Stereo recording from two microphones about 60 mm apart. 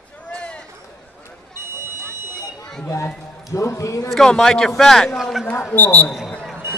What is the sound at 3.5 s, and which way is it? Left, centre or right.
Speech, left.